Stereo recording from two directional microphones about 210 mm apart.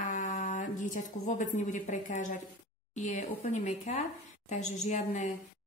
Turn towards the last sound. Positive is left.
turn(degrees=35)  # may be behind; listen again after turning